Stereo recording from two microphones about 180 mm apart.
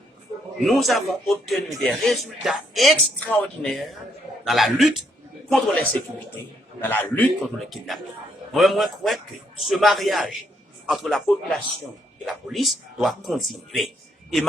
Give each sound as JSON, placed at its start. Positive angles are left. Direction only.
{"t": 0.6, "sound": "a man's voice", "side_deg": 0}
{"t": 7.5, "sound": "speech", "side_deg": 0}